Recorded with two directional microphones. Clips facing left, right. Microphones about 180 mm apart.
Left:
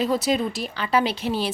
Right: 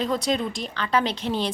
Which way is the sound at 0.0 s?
5° left (ahead or behind).